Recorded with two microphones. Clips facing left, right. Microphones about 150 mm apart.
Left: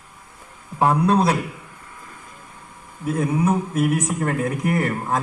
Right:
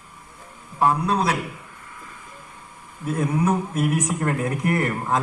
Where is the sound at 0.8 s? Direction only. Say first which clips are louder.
Left 3 dB; 35° left (ahead or behind).